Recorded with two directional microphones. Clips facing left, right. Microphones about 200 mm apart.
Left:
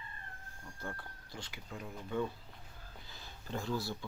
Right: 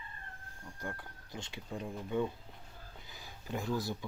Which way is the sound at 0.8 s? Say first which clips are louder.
Right 2 dB; 15° right (ahead or behind).